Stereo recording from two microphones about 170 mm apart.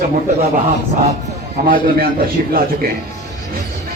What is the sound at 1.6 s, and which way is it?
Speech, 65° right (ahead or behind).